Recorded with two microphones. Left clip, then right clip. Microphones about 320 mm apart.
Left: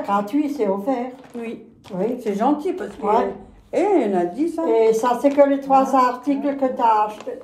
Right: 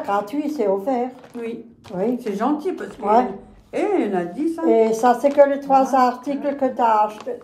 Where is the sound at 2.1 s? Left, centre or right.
Centre.